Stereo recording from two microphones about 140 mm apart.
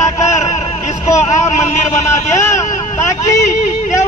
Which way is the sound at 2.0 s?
20° left (ahead or behind).